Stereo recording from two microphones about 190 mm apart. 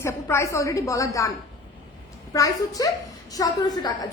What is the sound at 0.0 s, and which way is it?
A woman's voice, 15° left (ahead or behind).